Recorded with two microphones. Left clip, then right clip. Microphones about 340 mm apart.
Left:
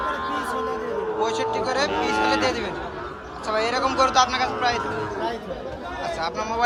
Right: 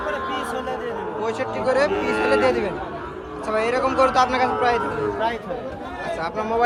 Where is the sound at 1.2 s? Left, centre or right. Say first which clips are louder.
Right 1 dB; centre.